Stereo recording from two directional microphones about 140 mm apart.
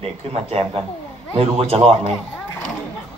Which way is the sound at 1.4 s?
40° right (ahead or behind).